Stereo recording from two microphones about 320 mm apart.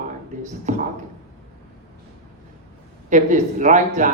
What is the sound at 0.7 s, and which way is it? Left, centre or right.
Speech, right.